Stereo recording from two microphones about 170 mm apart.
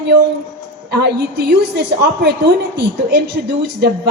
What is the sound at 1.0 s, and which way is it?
A woman's voice, 75° right (ahead or behind).